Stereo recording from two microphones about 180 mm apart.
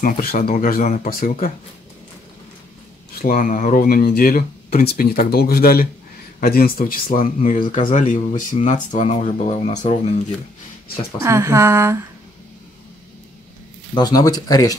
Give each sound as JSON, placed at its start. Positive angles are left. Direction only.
{"t": 0.0, "sound": "speech", "side_deg": 50}
{"t": 3.2, "sound": "speech", "side_deg": 50}
{"t": 11.2, "sound": "speech", "side_deg": -15}
{"t": 13.9, "sound": "speech", "side_deg": 20}